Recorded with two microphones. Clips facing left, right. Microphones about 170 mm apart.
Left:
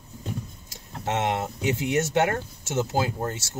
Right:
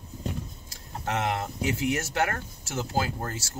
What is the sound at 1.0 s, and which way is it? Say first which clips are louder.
Speech: left 3 dB; 20° left (ahead or behind).